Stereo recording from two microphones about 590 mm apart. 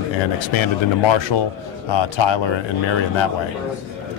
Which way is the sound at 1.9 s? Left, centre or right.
Left.